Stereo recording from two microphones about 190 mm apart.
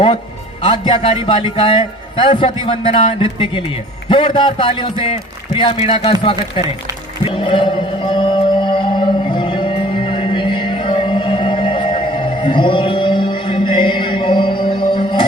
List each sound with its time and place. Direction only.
0.6 s a man's voice: 25° left (ahead or behind)
7.3 s music: 25° left (ahead or behind)